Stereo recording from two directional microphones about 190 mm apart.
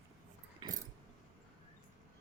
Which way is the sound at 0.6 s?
25° right (ahead or behind).